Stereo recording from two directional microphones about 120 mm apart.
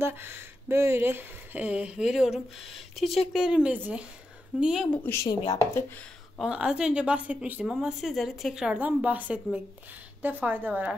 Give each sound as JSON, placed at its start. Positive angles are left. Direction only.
{"t": 0.0, "sound": "speech", "side_deg": -20}
{"t": 4.9, "sound": "speech", "side_deg": 20}
{"t": 6.3, "sound": "speech", "side_deg": -5}